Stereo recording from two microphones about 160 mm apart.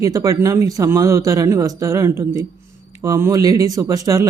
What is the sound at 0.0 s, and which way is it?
Speech, 20° right (ahead or behind).